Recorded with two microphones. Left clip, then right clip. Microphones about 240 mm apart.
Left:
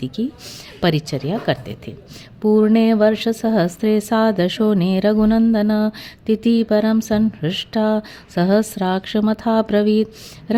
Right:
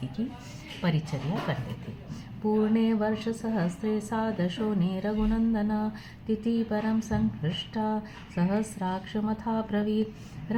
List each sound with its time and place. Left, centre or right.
0.8 s speech: left
2.5 s speech: left